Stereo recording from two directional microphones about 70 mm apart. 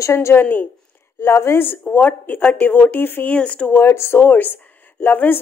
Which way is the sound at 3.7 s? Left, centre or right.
Left.